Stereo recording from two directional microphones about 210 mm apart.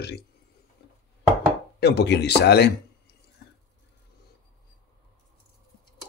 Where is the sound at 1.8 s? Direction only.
55° left (ahead or behind).